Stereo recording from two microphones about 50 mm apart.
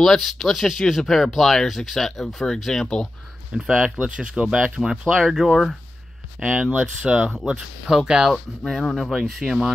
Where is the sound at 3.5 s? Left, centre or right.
Centre.